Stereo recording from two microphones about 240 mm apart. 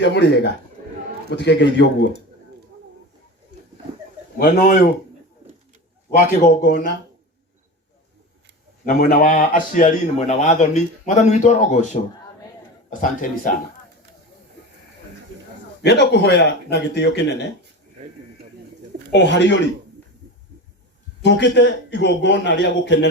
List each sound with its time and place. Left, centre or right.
0.0 s a man's voice: left
4.4 s a man's voice: left
6.1 s a man's voice: left
8.9 s a man's voice: left
12.9 s a man's voice: left
15.8 s a man's voice: left
19.1 s a man's voice: left
21.2 s a man's voice: left